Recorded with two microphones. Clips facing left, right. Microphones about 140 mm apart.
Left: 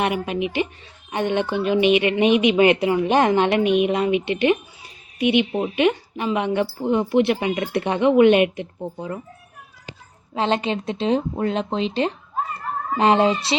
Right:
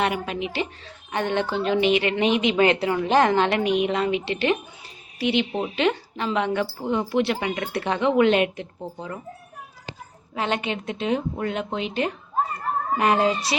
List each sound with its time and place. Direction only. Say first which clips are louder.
0.0 s a woman's voice: left 3 dB; 20° left (ahead or behind)
10.3 s a woman's voice: left 4 dB; 30° left (ahead or behind)